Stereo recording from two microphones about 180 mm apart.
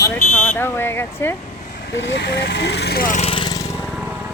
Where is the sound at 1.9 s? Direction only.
80° left; by 3.2 s 55° left (ahead or behind).